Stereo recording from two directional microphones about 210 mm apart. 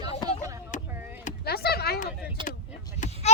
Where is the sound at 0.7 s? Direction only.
35° left (ahead or behind).